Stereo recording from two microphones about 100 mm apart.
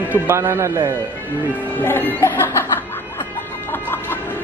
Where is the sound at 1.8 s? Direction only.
20° left (ahead or behind).